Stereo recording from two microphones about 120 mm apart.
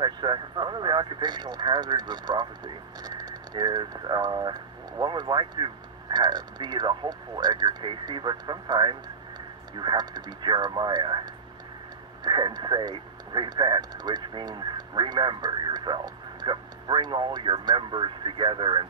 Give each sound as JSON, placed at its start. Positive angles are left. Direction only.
{"t": 0.0, "sound": "speech", "side_deg": -40}